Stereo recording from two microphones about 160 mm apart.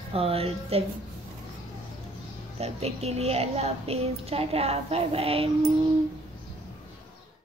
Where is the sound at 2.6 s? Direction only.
40° right (ahead or behind).